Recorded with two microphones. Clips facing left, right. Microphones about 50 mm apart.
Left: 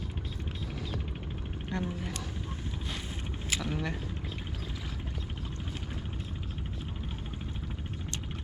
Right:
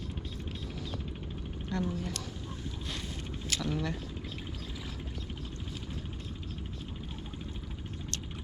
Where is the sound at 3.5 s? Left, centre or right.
Centre.